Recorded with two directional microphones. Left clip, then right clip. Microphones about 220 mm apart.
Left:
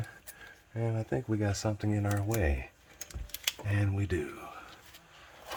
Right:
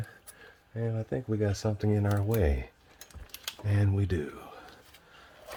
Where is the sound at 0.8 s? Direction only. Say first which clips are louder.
Even; 15° right (ahead or behind).